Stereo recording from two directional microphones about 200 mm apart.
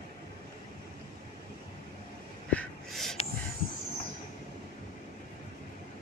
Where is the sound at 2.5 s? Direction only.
5° left (ahead or behind).